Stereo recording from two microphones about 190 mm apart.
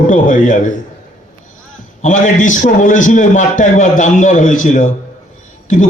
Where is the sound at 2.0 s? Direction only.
40° left (ahead or behind).